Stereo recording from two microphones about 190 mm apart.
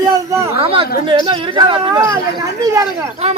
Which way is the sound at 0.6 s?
30° right (ahead or behind).